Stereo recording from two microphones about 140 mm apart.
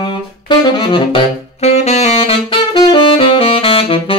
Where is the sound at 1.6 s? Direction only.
50° left (ahead or behind).